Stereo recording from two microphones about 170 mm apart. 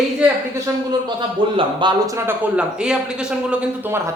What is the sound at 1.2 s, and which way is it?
A man's voice, 30° right (ahead or behind).